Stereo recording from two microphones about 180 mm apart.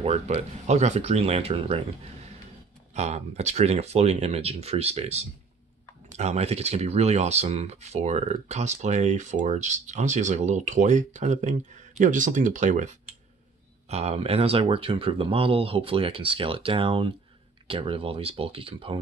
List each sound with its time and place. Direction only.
0.0 s speech: 35° right (ahead or behind)
2.9 s speech: 40° right (ahead or behind)